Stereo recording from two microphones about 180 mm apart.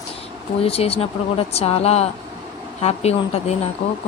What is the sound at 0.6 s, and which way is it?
Speech, 35° left (ahead or behind).